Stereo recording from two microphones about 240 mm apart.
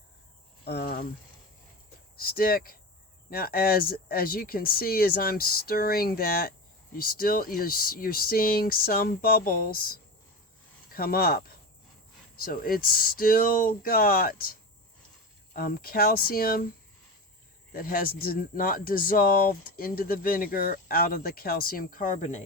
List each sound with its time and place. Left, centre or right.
0.6 s cricket: left
2.1 s speech: left
15.5 s speech: left
17.7 s speech: left